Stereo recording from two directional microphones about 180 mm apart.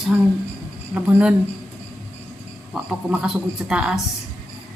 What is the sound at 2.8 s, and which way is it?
A man's voice, 5° right (ahead or behind).